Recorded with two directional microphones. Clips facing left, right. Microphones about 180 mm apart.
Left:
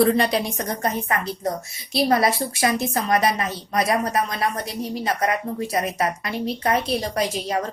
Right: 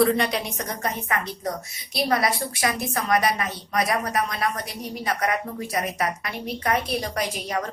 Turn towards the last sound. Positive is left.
turn(degrees=30)  # may be behind; listen again after turning